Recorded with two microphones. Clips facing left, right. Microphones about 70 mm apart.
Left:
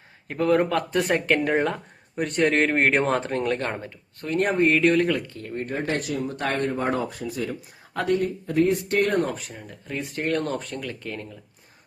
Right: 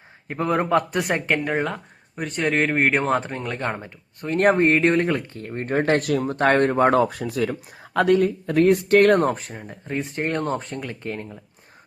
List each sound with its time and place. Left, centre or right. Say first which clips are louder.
0.3 s speech: even; right
1.5 s speech: left 1 dB; centre
4.5 s speech: right 1 dB; right
6.3 s speech: right 9 dB; right
9.5 s speech: right 4 dB; right